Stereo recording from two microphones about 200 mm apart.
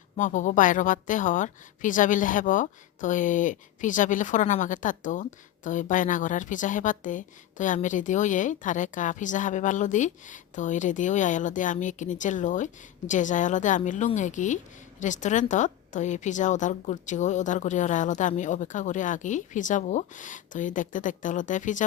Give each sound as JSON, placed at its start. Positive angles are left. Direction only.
{"t": 0.2, "sound": "a woman's voice", "side_deg": 40}